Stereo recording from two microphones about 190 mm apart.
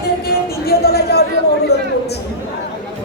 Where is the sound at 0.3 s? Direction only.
55° left (ahead or behind).